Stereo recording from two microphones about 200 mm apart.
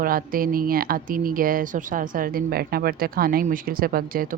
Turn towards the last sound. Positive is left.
turn(degrees=-45)  # may be behind; listen again after turning